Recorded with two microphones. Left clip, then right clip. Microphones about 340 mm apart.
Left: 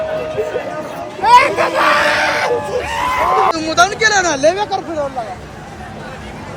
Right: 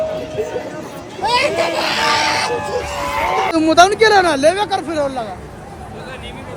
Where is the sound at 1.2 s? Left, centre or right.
Centre.